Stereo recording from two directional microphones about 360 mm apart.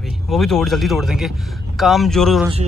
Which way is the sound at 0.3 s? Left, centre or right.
Centre.